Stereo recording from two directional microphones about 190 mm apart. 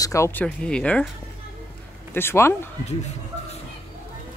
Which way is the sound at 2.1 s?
10° left (ahead or behind).